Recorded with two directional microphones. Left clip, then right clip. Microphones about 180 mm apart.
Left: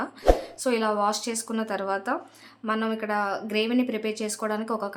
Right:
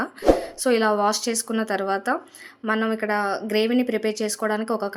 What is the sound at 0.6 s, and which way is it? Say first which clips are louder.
Speech: right 4 dB; 20° right (ahead or behind).